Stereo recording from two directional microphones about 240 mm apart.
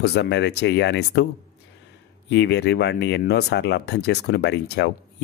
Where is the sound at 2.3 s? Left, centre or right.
Left.